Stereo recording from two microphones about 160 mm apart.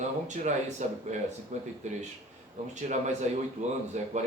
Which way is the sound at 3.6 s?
45° right (ahead or behind).